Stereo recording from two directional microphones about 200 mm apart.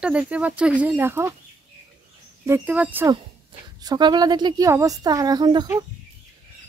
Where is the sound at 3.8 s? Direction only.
20° right (ahead or behind).